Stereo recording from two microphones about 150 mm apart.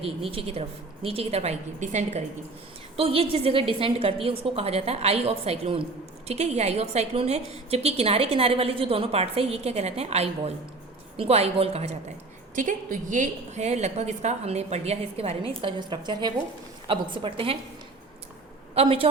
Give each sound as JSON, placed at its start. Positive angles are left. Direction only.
{"t": 0.3, "sound": "a woman's voice", "side_deg": -40}
{"t": 12.5, "sound": "a woman's voice", "side_deg": -60}
{"t": 18.7, "sound": "a woman's voice", "side_deg": -40}